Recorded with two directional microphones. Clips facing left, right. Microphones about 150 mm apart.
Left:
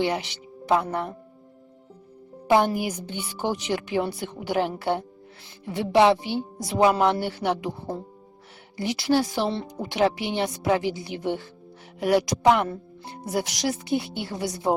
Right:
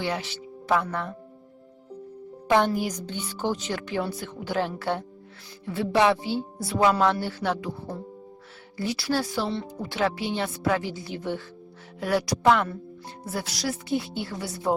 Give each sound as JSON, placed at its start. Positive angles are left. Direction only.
{"t": 0.0, "sound": "speech", "side_deg": 15}
{"t": 2.5, "sound": "speech", "side_deg": 15}